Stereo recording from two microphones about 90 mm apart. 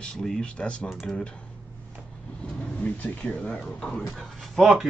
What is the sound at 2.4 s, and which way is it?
Speech, 15° left (ahead or behind).